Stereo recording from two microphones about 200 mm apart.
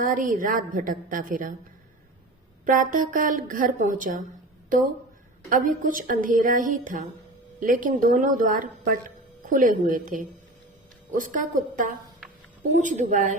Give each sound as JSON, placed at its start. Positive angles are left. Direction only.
{"t": 0.0, "sound": "speech", "side_deg": -40}
{"t": 2.6, "sound": "speech", "side_deg": -40}
{"t": 5.5, "sound": "speech", "side_deg": -40}
{"t": 12.7, "sound": "speech", "side_deg": -40}